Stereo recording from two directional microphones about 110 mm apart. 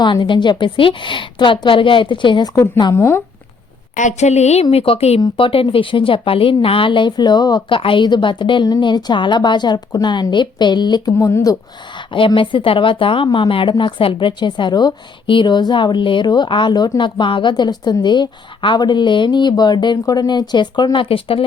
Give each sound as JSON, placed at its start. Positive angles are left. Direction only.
{"t": 0.0, "sound": "speech", "side_deg": 45}
{"t": 2.9, "sound": "speech", "side_deg": 20}
{"t": 4.0, "sound": "a woman's voice", "side_deg": 90}
{"t": 4.7, "sound": "a woman's voice", "side_deg": 60}
{"t": 5.2, "sound": "speech", "side_deg": 55}
{"t": 7.8, "sound": "speech", "side_deg": 50}
{"t": 11.9, "sound": "speech", "side_deg": 45}